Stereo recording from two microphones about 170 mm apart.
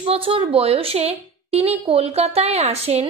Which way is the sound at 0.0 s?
35° right (ahead or behind).